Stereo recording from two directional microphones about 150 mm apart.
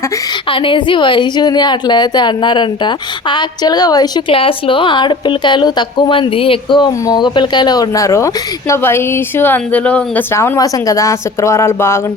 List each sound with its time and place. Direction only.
0.5 s a woman's voice: 35° left (ahead or behind)
4.4 s a woman's voice: 35° left (ahead or behind); by 11.9 s 15° left (ahead or behind)